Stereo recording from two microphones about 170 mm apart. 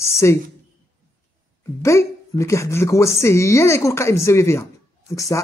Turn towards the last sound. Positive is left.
turn(degrees=20)  # may be behind; listen again after turning